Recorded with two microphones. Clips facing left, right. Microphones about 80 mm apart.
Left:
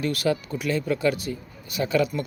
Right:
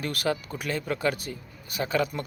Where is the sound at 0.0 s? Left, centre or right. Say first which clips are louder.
Left 4 dB; right.